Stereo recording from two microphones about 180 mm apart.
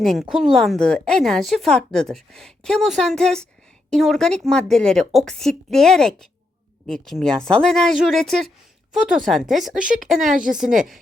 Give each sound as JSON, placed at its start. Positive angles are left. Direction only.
{"t": 0.0, "sound": "speech", "side_deg": 0}
{"t": 10.3, "sound": "a woman's voice", "side_deg": -50}
{"t": 10.8, "sound": "speech", "side_deg": 0}